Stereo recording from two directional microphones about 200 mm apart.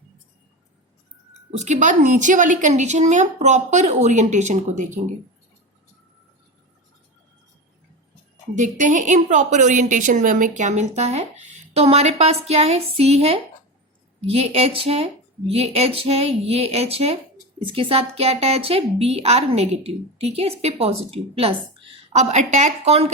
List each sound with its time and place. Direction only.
1.5 s a woman's voice: 35° right (ahead or behind)
8.5 s a woman's voice: 40° right (ahead or behind)